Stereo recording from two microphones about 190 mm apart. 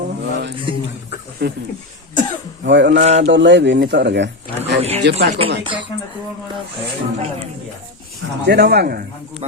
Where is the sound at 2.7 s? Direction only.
65° right (ahead or behind).